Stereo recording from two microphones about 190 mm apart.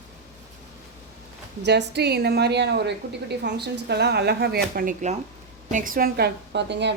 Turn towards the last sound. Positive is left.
turn(degrees=-65)  # may be behind; listen again after turning